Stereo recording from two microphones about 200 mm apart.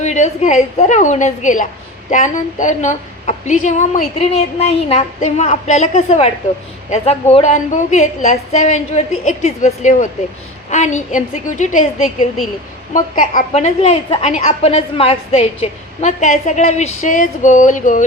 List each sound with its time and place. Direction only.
0.0 s a woman's voice: 35° left (ahead or behind)